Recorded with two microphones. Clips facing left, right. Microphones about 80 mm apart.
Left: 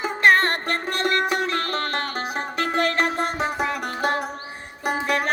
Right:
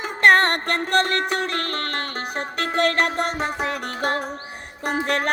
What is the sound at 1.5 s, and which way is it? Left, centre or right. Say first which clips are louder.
Music: left 1 dB; right.